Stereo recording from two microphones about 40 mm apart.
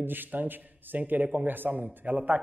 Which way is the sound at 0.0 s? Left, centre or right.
Right.